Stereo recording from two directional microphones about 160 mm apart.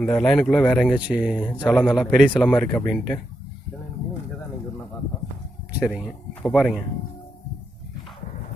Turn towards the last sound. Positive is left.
turn(degrees=-5)  # may be behind; listen again after turning